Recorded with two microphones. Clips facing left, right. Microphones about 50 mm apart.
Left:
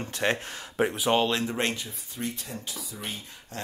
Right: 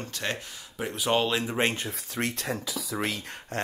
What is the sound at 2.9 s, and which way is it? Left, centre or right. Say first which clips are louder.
Speech: right 8 dB; right.